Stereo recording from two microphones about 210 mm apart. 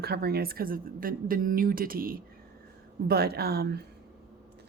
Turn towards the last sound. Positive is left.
turn(degrees=-50)  # may be behind; listen again after turning